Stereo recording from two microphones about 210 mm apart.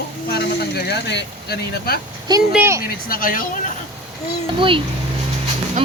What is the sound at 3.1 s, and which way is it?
Speech, 40° left (ahead or behind).